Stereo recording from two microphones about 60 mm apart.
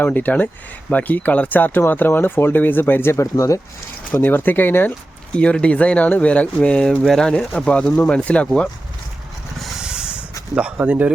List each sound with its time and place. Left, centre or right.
0.0 s speech: left
3.1 s speech: left
4.2 s speech: left
5.4 s speech: centre
7.0 s speech: centre
7.3 s speech: centre
9.8 s a sound: centre